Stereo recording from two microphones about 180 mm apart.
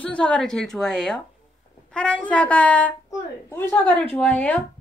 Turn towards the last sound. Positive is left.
turn(degrees=10)  # may be behind; listen again after turning